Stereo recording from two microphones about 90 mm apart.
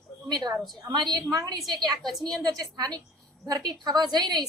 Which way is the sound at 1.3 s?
40° right (ahead or behind).